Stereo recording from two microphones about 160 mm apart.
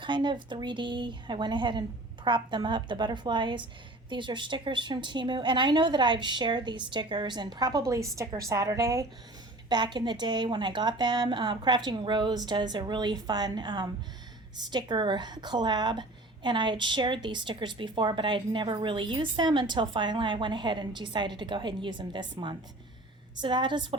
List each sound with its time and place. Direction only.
0.0 s a woman's voice: 30° right (ahead or behind)